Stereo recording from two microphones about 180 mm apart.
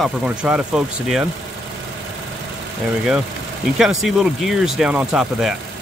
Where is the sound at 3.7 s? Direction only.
Centre (ahead or behind).